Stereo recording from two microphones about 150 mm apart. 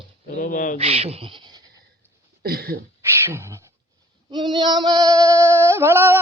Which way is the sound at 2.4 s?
90° right.